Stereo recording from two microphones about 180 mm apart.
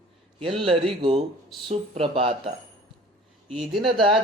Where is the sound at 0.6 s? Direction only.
30° right (ahead or behind).